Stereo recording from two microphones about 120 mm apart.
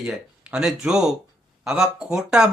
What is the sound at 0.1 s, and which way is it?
Speech, 5° right (ahead or behind).